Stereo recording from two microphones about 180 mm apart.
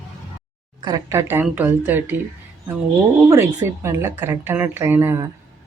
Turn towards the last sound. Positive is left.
turn(degrees=-15)  # may be behind; listen again after turning